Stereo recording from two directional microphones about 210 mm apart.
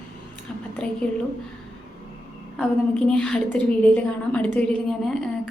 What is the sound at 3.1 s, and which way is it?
Speech, 5° left (ahead or behind).